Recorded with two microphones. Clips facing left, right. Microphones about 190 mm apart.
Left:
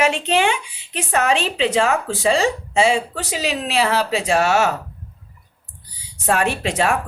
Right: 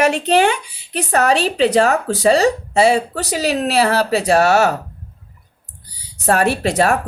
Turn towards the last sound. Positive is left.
turn(degrees=-40)  # may be behind; listen again after turning